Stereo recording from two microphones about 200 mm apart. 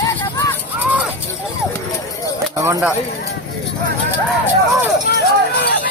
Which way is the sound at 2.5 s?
15° right (ahead or behind).